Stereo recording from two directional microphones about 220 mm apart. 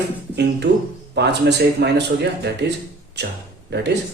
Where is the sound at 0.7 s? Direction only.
55° right (ahead or behind).